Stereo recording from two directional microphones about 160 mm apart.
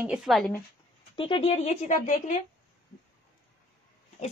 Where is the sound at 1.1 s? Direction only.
35° left (ahead or behind); by 2.3 s 50° left (ahead or behind).